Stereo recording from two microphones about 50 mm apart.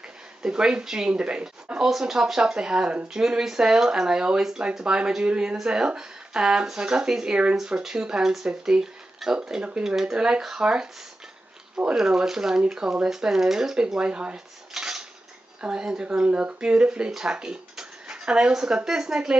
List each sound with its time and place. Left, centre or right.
0.4 s speech: centre
14.7 s dishes: centre
15.6 s speech: centre